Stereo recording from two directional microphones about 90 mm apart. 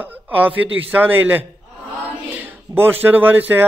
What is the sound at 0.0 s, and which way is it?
A man's voice, 20° right (ahead or behind).